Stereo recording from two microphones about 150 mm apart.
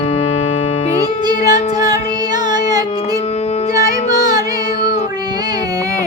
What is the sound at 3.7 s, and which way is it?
Music, 25° right (ahead or behind).